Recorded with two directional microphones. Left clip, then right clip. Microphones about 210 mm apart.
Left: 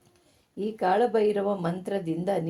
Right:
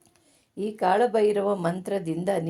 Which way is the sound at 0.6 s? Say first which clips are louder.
Right 2 dB; 25° right (ahead or behind).